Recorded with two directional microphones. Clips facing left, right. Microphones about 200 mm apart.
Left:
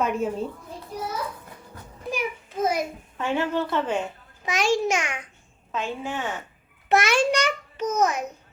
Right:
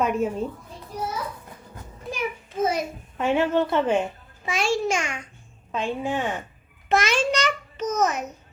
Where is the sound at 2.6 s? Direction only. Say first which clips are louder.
Even; 10° left (ahead or behind).